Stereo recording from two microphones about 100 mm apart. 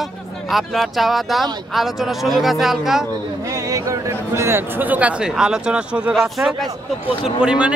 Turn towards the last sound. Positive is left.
turn(degrees=-10)  # may be behind; listen again after turning